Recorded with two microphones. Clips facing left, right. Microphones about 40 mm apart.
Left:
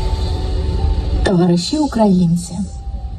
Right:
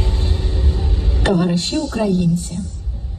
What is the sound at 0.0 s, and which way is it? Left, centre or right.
Music, right.